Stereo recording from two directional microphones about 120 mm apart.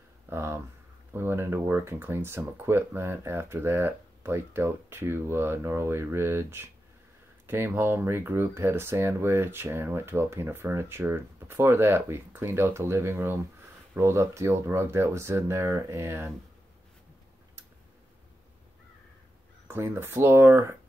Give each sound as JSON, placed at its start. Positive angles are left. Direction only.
{"t": 0.3, "sound": "speech", "side_deg": -20}
{"t": 19.7, "sound": "speech", "side_deg": -20}